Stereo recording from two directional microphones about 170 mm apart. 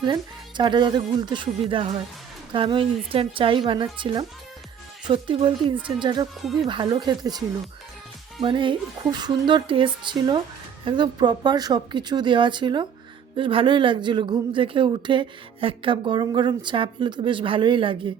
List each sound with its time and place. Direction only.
0.0 s speech: 25° right (ahead or behind)
2.5 s speech: 30° right (ahead or behind)